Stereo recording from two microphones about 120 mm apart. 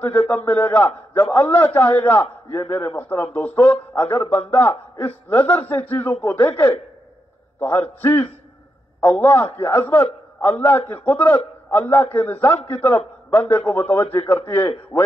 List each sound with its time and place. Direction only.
0.0 s a man's voice: 15° left (ahead or behind)